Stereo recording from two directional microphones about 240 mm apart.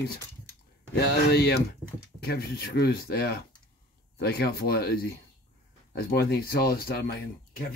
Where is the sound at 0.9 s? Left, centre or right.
Left.